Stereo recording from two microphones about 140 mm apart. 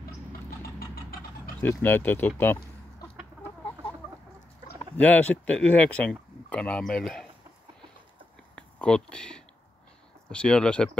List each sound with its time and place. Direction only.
1.1 s a sound: 90° left
1.6 s speech: 15° left (ahead or behind)
4.9 s speech: 10° left (ahead or behind)
8.5 s speech: 5° left (ahead or behind)